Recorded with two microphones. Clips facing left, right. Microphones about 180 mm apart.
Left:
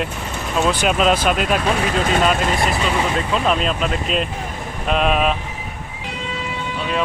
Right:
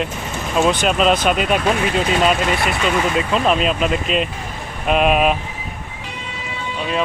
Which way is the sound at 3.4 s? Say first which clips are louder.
Right 2 dB; 5° right (ahead or behind).